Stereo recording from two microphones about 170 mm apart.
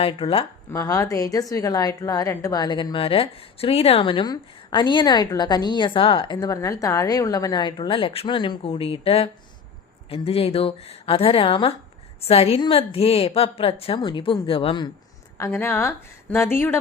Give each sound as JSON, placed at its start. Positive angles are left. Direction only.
{"t": 0.0, "sound": "a woman's voice", "side_deg": 35}
{"t": 0.7, "sound": "a woman's voice", "side_deg": 20}
{"t": 15.4, "sound": "a woman's voice", "side_deg": 15}